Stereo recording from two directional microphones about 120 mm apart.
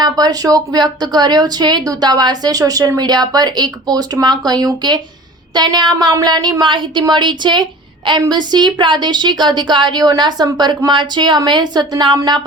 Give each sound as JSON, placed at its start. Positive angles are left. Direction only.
{"t": 0.0, "sound": "a woman's voice", "side_deg": -30}